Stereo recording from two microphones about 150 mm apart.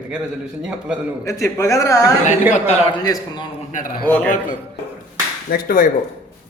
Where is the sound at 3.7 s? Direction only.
60° left (ahead or behind).